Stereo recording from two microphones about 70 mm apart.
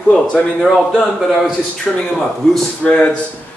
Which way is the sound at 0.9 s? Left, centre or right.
Centre.